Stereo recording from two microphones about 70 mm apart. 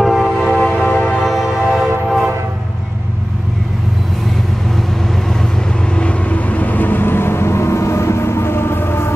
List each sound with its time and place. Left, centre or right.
0.0 s music: centre
0.7 s music: centre
1.2 s music: centre
5.9 s vehicle: centre; by 9.1 s left